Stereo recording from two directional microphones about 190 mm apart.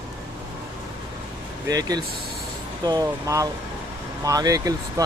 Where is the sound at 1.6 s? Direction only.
20° right (ahead or behind).